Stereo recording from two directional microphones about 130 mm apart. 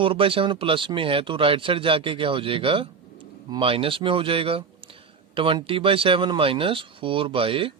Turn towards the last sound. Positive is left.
turn(degrees=-45)  # may be behind; listen again after turning